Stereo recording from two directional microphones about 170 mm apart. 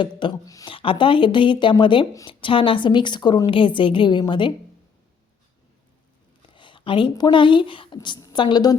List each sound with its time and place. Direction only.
0.0 s speech: 30° left (ahead or behind)
6.6 s a woman's voice: 30° left (ahead or behind)